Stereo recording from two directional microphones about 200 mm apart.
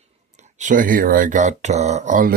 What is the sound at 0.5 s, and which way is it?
Speech, 40° right (ahead or behind).